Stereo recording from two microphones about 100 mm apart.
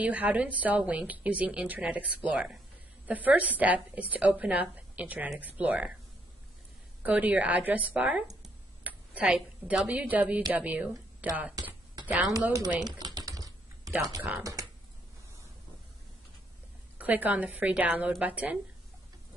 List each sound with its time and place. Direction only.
0.0 s a woman's voice: 15° right (ahead or behind)
7.0 s a woman's voice: 15° right (ahead or behind)
8.8 s a sound: 15° right (ahead or behind)
9.8 s a woman's voice: 15° right (ahead or behind)
12.8 s typing: 40° right (ahead or behind)
14.4 s speech: 35° right (ahead or behind)
17.0 s a woman's voice: 15° right (ahead or behind)